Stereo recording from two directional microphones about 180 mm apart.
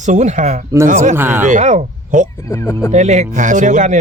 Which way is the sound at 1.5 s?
40° right (ahead or behind).